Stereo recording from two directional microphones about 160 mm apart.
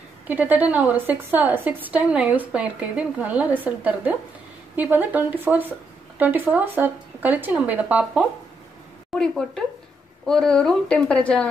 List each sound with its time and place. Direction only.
0.3 s a woman's voice: 10° right (ahead or behind)
9.2 s a woman's voice: 5° left (ahead or behind)